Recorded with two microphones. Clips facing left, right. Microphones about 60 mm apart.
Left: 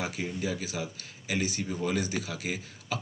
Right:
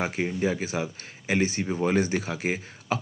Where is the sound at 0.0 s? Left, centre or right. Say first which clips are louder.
Right 6 dB; right.